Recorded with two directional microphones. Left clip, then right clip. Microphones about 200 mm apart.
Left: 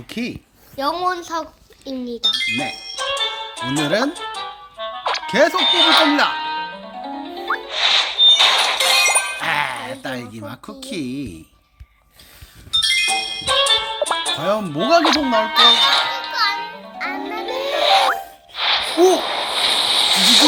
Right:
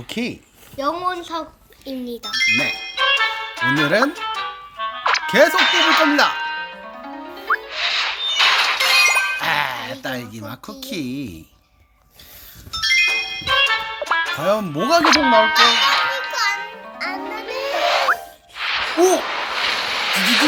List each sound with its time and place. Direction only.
0.1 s a woman's voice: 5° right (ahead or behind)
0.8 s a child's voice: 35° left (ahead or behind)
2.3 s music: centre (ahead or behind)
12.7 s music: centre (ahead or behind)
16.3 s music: 10° right (ahead or behind)
17.4 s a sound: centre (ahead or behind)